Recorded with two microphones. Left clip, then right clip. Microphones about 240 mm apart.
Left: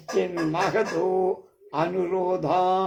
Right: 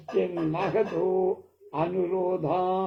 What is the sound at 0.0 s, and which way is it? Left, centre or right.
Speech, left.